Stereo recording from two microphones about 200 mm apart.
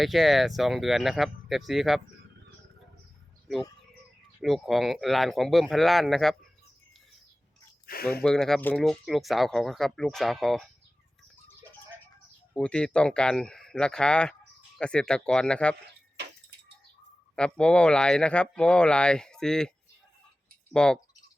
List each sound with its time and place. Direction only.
0.0 s speech: centre (ahead or behind)
4.4 s speech: centre (ahead or behind)
7.9 s speech: 50° left (ahead or behind)
8.2 s speech: 5° left (ahead or behind)
12.5 s speech: 5° left (ahead or behind)
17.3 s speech: 5° left (ahead or behind)
20.7 s speech: 5° left (ahead or behind)